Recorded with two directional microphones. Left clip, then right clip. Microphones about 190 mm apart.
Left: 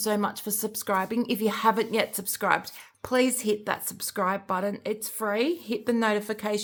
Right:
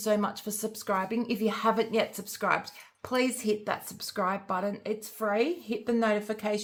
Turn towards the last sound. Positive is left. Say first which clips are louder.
# left 2 dB
turn(degrees=45)  # may be behind; listen again after turning